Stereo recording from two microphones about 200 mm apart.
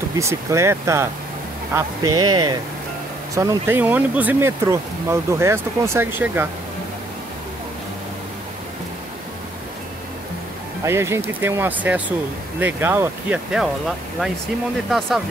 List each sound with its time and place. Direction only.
0.2 s speech: 15° right (ahead or behind)
10.8 s speech: 15° right (ahead or behind)